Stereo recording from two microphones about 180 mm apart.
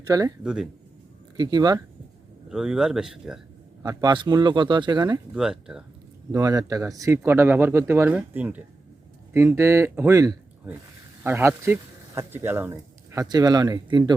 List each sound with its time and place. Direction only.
0.1 s speech: 20° right (ahead or behind)
0.4 s speech: 5° right (ahead or behind)
1.4 s speech: 25° right (ahead or behind)
2.5 s speech: 5° right (ahead or behind)
3.8 s speech: 25° right (ahead or behind)
5.3 s speech: 5° right (ahead or behind)
6.3 s speech: 20° right (ahead or behind)